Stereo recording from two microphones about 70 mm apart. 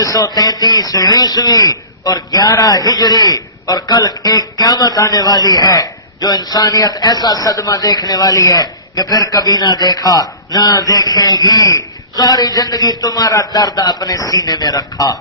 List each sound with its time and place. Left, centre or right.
0.0 s speech: left
0.3 s a man's voice: left